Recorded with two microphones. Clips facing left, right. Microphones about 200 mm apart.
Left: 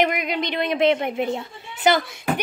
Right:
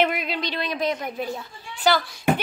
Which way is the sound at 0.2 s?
20° left (ahead or behind).